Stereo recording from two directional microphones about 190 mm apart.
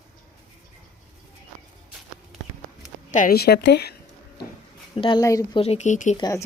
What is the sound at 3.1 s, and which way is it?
Speech, 45° left (ahead or behind).